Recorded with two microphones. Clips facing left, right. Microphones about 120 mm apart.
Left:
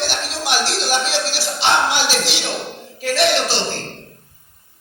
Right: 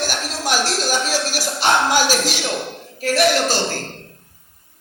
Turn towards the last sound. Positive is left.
turn(degrees=-45)  # may be behind; listen again after turning